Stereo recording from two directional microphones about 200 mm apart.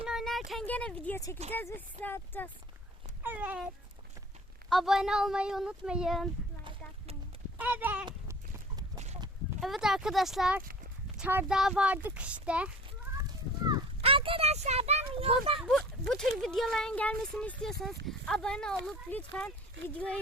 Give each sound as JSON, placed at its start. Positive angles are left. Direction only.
{"t": 0.0, "sound": "speech", "side_deg": 0}
{"t": 3.2, "sound": "cat", "side_deg": -10}
{"t": 4.7, "sound": "speech", "side_deg": 0}
{"t": 7.6, "sound": "cat", "side_deg": -10}
{"t": 8.0, "sound": "a sound", "side_deg": -20}
{"t": 9.6, "sound": "speech", "side_deg": 0}
{"t": 13.7, "sound": "a child's voice", "side_deg": -25}
{"t": 16.0, "sound": "speech", "side_deg": 0}